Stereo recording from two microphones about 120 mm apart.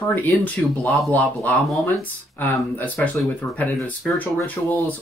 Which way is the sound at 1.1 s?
15° left (ahead or behind).